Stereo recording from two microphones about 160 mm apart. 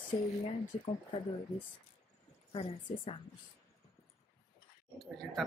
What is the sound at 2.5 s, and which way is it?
Speech, 35° left (ahead or behind).